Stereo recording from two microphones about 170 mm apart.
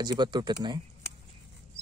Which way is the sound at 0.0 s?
25° right (ahead or behind).